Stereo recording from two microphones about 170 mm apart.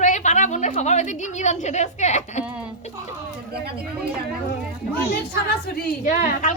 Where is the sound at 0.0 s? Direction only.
45° left (ahead or behind).